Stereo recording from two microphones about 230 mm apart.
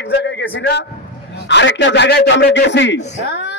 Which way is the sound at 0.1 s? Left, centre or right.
Left.